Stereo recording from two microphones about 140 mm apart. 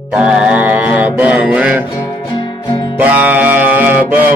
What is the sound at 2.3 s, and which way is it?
Music, 35° left (ahead or behind).